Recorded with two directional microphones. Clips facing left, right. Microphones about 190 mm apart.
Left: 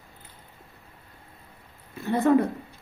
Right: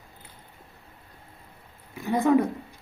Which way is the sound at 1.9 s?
15° right (ahead or behind).